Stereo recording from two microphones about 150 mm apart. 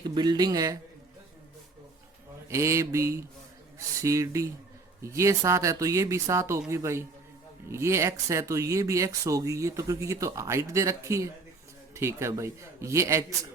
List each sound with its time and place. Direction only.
0.0 s speech: 30° right (ahead or behind)
2.5 s speech: 20° right (ahead or behind)